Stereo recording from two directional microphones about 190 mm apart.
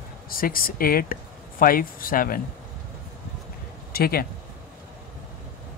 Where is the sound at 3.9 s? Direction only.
55° left (ahead or behind).